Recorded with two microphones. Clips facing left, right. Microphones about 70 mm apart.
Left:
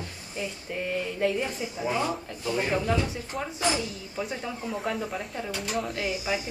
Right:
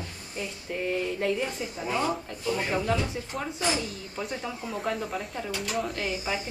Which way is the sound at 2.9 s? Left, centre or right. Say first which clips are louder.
Left 1 dB; centre.